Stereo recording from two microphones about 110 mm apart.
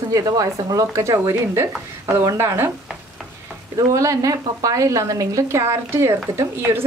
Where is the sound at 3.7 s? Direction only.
30° right (ahead or behind).